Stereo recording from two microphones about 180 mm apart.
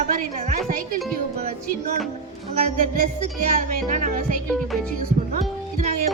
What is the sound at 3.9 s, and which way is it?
Music, 45° right (ahead or behind).